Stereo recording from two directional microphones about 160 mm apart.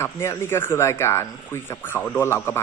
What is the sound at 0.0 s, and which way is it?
Speech, 15° left (ahead or behind).